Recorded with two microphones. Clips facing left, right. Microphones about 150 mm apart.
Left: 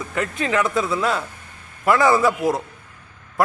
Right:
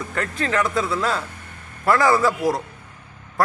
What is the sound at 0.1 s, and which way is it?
Speech, 15° left (ahead or behind).